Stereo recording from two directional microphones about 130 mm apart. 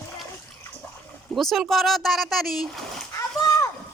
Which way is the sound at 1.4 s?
Centre (ahead or behind).